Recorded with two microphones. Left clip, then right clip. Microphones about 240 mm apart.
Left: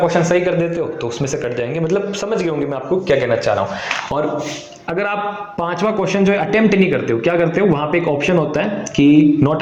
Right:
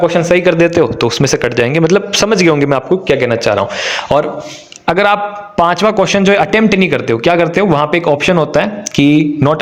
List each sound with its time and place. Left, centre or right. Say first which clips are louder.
0.0 s a man's voice: right 5 dB; right